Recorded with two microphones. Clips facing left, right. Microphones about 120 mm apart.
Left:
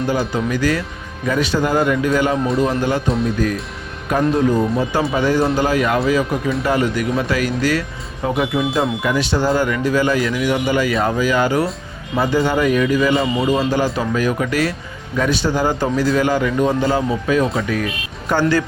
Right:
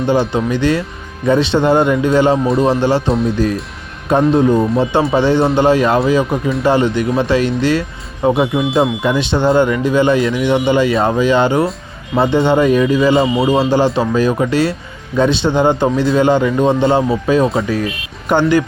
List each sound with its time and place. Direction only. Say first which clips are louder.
0.0 s speech: right 5 dB; 25° right (ahead or behind)
3.1 s speech: right 4 dB; centre (ahead or behind)
3.3 s speech: right 3 dB; 30° right (ahead or behind)
18.3 s speech: right 4 dB; 20° right (ahead or behind)